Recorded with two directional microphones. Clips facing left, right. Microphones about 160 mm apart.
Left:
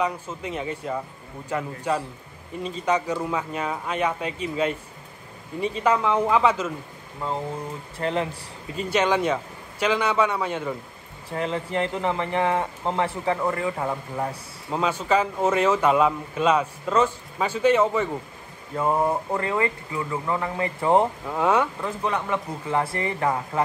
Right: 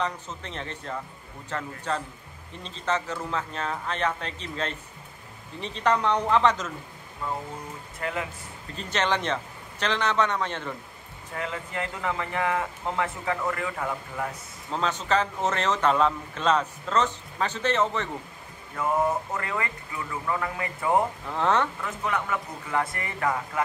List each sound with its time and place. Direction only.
0.0 s speech: 10° left (ahead or behind)
8.0 s speech: 30° left (ahead or behind)
8.7 s speech: 10° left (ahead or behind)
11.2 s speech: 30° left (ahead or behind)
14.7 s speech: 10° left (ahead or behind)
18.7 s speech: 30° left (ahead or behind)
21.3 s speech: 10° left (ahead or behind)
21.8 s speech: 30° left (ahead or behind)